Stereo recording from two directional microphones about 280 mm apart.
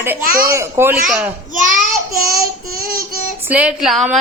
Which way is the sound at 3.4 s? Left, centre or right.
Centre.